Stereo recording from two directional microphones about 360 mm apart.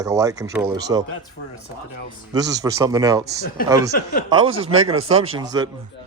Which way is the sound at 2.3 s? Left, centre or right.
Centre.